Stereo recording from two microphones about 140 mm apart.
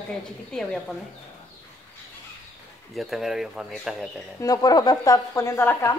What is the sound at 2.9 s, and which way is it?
Speech, centre (ahead or behind).